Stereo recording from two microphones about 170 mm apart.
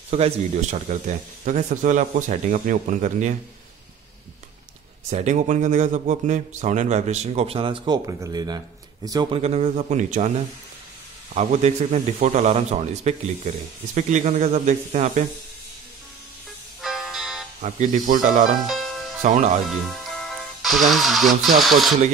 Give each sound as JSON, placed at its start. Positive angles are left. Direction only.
{"t": 0.1, "sound": "speech", "side_deg": -40}
{"t": 5.1, "sound": "speech", "side_deg": -45}
{"t": 9.3, "sound": "speech", "side_deg": -40}
{"t": 11.3, "sound": "speech", "side_deg": -45}
{"t": 16.8, "sound": "music", "side_deg": 0}
{"t": 17.6, "sound": "speech", "side_deg": -45}
{"t": 18.7, "sound": "music", "side_deg": 0}
{"t": 19.2, "sound": "speech", "side_deg": -45}
{"t": 19.7, "sound": "speech", "side_deg": 0}